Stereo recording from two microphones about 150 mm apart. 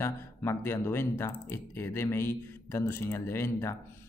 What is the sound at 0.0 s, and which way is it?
Speech, 15° left (ahead or behind).